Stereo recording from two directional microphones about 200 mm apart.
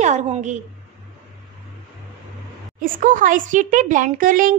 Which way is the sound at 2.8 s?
40° right (ahead or behind).